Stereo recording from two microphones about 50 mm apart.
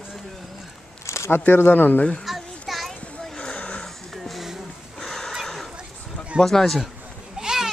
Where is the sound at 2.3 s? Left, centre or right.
Centre.